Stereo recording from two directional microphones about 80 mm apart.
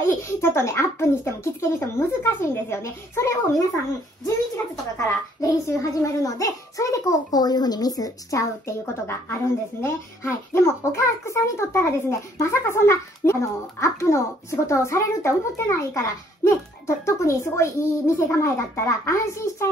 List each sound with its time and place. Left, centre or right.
0.0 s a child's voice: left
4.9 s a child's voice: left